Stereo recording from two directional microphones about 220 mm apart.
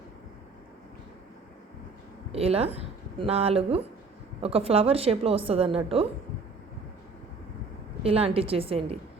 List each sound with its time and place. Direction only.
2.3 s a woman's voice: 25° right (ahead or behind)
8.0 s a woman's voice: 25° right (ahead or behind)